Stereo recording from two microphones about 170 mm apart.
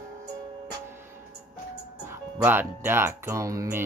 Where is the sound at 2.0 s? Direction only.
10° right (ahead or behind).